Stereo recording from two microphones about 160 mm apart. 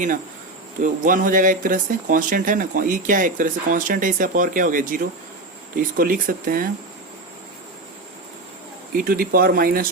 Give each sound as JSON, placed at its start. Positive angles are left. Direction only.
{"t": 0.8, "sound": "speech", "side_deg": -60}
{"t": 8.9, "sound": "speech", "side_deg": -65}